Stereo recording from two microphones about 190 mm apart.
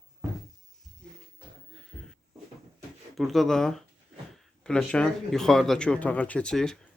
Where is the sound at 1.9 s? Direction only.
5° left (ahead or behind).